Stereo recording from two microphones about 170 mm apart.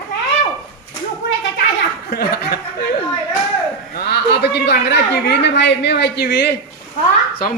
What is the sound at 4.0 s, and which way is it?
A woman's voice, 75° left (ahead or behind).